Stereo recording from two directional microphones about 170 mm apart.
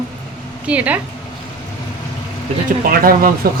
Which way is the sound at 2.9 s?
60° right (ahead or behind).